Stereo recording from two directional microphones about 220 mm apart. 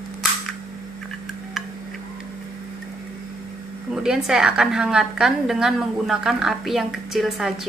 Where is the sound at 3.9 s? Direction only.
Centre (ahead or behind).